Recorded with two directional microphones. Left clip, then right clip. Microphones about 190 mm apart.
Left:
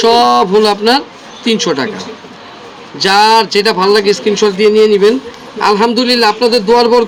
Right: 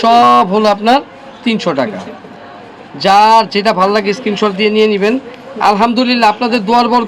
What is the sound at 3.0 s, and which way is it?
A man's voice, 25° right (ahead or behind).